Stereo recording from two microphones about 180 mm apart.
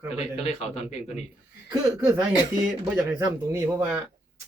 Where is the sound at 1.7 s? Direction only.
15° right (ahead or behind).